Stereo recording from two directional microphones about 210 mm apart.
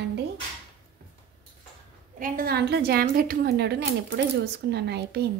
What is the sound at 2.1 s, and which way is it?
A woman's voice, 40° right (ahead or behind).